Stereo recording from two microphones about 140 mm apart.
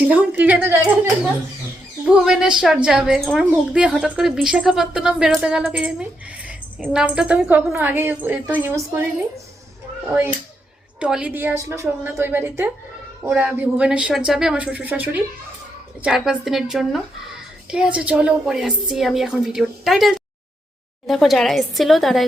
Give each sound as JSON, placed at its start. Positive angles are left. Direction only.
{"t": 0.0, "sound": "speech", "side_deg": -10}
{"t": 2.0, "sound": "a woman's voice", "side_deg": -5}
{"t": 10.1, "sound": "a woman's voice", "side_deg": -10}